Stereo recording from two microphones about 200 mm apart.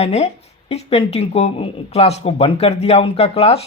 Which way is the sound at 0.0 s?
30° left (ahead or behind).